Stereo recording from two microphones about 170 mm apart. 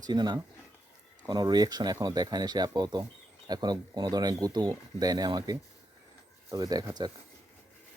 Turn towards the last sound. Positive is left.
turn(degrees=-25)  # may be behind; listen again after turning